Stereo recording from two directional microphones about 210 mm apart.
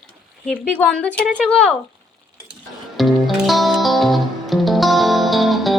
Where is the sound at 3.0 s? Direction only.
Centre (ahead or behind).